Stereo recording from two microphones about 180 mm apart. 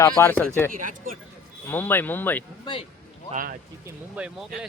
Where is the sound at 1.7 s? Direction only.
10° left (ahead or behind).